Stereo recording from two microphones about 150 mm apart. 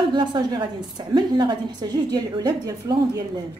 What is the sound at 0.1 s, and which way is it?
A woman's voice, 30° right (ahead or behind).